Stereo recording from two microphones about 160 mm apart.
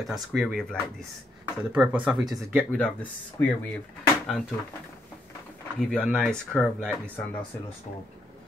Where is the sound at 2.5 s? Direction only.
5° left (ahead or behind).